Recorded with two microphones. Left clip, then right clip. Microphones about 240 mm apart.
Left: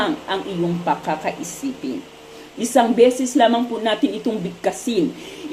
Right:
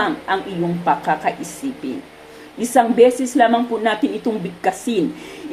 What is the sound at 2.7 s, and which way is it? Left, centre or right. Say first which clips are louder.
A woman's voice: right 2 dB; right.